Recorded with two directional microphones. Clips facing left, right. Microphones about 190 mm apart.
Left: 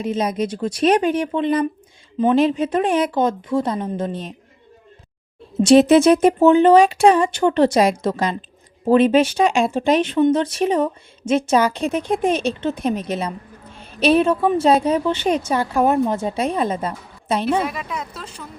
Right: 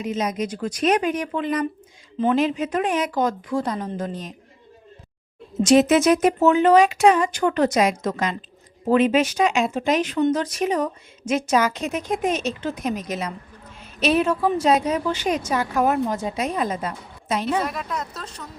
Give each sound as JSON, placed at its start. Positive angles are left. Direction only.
{"t": 0.0, "sound": "a woman's voice", "side_deg": 30}
{"t": 5.6, "sound": "a woman's voice", "side_deg": 30}
{"t": 17.6, "sound": "a woman's voice", "side_deg": 0}